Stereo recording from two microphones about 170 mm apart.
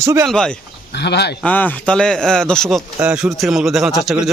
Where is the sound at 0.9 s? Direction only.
80° left.